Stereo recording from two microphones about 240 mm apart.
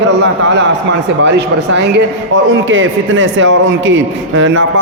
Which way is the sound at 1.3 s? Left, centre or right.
Right.